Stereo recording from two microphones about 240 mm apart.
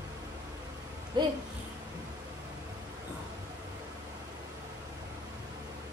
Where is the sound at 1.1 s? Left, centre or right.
Centre.